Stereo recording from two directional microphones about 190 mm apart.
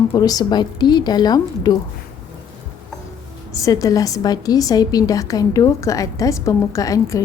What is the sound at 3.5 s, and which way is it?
A woman's voice, 15° left (ahead or behind).